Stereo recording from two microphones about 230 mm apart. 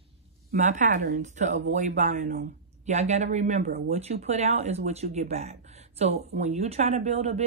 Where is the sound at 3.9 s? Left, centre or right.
Right.